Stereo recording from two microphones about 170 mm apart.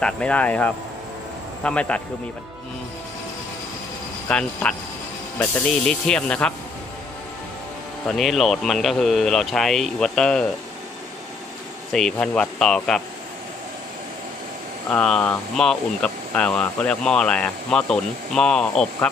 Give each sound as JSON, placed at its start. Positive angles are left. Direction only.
{"t": 0.0, "sound": "speech", "side_deg": 5}
{"t": 4.3, "sound": "speech", "side_deg": 5}
{"t": 8.1, "sound": "speech", "side_deg": 0}
{"t": 11.9, "sound": "speech", "side_deg": 5}
{"t": 14.9, "sound": "speech", "side_deg": 5}